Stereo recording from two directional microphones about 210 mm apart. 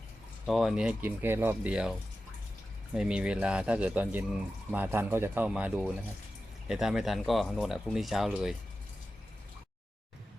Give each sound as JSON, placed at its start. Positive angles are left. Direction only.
{"t": 0.4, "sound": "speech", "side_deg": 0}